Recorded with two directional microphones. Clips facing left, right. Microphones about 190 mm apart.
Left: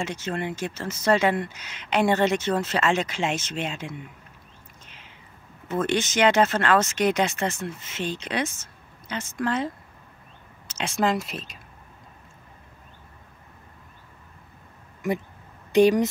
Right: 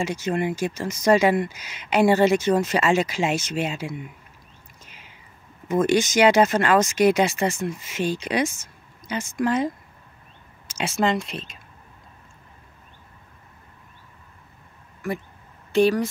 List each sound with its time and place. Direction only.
0.0 s speech: 10° right (ahead or behind)
4.8 s a sound: 10° right (ahead or behind)
5.7 s speech: 10° right (ahead or behind)
10.7 s speech: 5° right (ahead or behind)
15.7 s speech: 15° left (ahead or behind)